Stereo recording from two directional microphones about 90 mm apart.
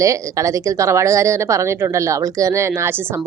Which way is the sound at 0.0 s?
35° right (ahead or behind).